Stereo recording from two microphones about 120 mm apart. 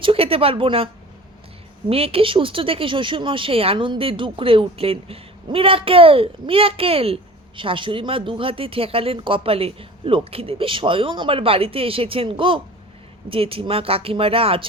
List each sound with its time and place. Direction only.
0.0 s speech: 50° right (ahead or behind)
1.9 s speech: 50° right (ahead or behind)